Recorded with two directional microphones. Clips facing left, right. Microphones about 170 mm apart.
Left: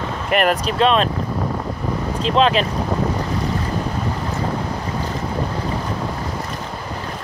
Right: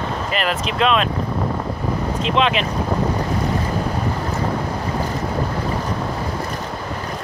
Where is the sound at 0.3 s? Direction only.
55° left (ahead or behind).